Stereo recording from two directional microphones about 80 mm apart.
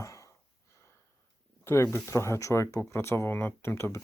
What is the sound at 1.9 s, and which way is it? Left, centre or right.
Speech, left.